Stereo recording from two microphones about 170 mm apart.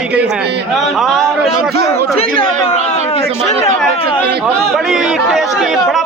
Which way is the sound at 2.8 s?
40° left (ahead or behind).